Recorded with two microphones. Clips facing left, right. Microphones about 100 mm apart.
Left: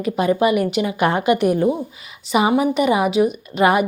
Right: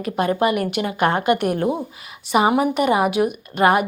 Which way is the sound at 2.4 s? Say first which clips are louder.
Even; 40° right (ahead or behind).